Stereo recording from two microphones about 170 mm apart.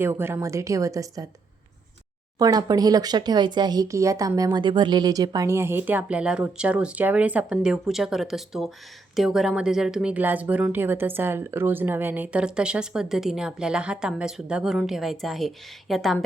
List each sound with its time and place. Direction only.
0.0 s speech: 15° right (ahead or behind)
2.4 s a woman's voice: 25° right (ahead or behind); by 16.1 s centre (ahead or behind)